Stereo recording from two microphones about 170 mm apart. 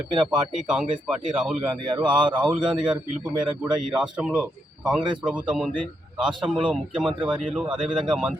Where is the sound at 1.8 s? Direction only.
30° right (ahead or behind).